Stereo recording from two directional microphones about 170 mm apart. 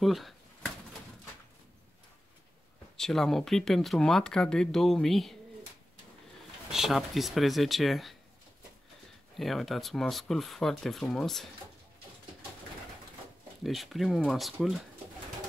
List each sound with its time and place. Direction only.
0.0 s a sound: centre (ahead or behind)
3.0 s speech: centre (ahead or behind)
6.7 s speech: centre (ahead or behind)
9.4 s speech: centre (ahead or behind)
13.7 s speech: centre (ahead or behind)